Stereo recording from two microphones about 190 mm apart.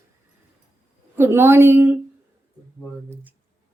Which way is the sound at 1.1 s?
10° right (ahead or behind).